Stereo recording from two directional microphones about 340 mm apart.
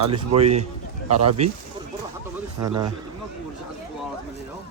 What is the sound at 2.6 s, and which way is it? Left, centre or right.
Speech, centre.